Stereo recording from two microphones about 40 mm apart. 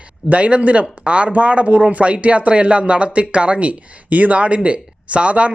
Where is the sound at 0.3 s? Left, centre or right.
Right.